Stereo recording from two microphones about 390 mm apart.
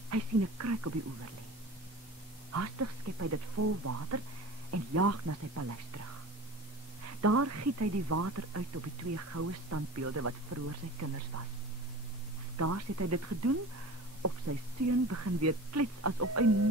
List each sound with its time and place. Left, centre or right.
0.1 s speech: right
2.5 s speech: right
7.2 s speech: right
12.5 s speech: right